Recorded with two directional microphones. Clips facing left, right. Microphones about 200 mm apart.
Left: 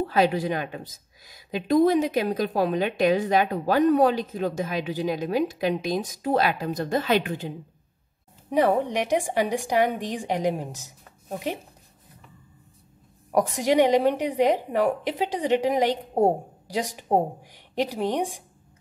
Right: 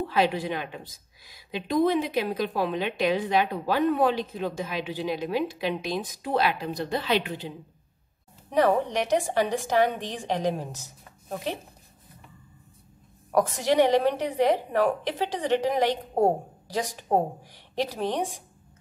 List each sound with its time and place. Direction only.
0.0 s a woman's voice: 45° left (ahead or behind)
8.5 s a woman's voice: 15° left (ahead or behind)
13.3 s a woman's voice: 15° left (ahead or behind)